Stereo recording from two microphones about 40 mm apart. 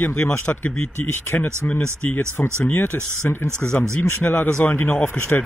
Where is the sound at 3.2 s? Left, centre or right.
Left.